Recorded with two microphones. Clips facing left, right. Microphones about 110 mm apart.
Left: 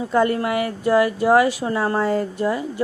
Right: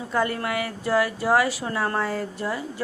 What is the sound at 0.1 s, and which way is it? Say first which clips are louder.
Speech: left 5 dB; 25° left (ahead or behind).